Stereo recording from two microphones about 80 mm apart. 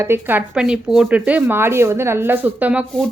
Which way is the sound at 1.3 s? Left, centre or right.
Right.